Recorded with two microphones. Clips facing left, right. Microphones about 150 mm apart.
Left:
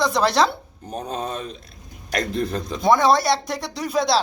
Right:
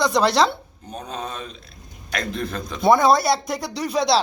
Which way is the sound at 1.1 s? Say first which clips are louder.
Left 3 dB; 45° left (ahead or behind).